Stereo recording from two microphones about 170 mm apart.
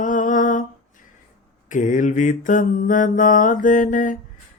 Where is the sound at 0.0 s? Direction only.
50° left (ahead or behind).